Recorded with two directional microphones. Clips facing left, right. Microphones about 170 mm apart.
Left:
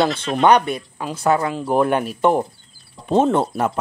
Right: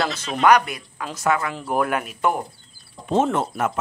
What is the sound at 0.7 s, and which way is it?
Speech, 30° left (ahead or behind).